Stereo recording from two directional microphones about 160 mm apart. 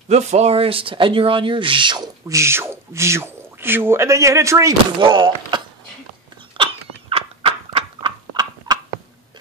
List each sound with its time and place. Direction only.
0.1 s speech: 45° right (ahead or behind); by 4.7 s 20° right (ahead or behind)
5.0 s speech: 30° right (ahead or behind)
6.5 s a sound: 35° right (ahead or behind)